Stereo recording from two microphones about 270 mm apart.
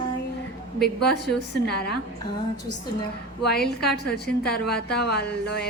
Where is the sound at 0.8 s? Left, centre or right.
Left.